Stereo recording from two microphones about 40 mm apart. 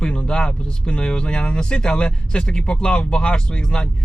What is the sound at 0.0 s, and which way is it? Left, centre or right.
Speech, left.